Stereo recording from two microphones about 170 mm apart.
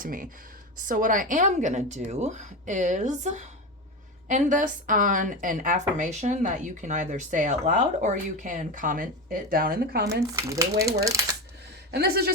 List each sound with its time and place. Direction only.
0.0 s a woman's voice: 55° right (ahead or behind); by 10.2 s 75° right (ahead or behind)
10.3 s speech: 20° right (ahead or behind)
11.9 s speech: 70° right (ahead or behind)